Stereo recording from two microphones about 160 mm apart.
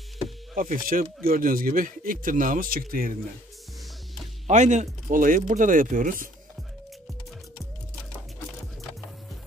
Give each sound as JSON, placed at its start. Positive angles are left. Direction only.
{"t": 0.6, "sound": "speech", "side_deg": -60}
{"t": 4.5, "sound": "speech", "side_deg": -45}